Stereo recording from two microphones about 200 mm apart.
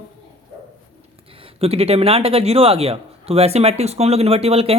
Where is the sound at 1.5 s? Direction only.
30° right (ahead or behind).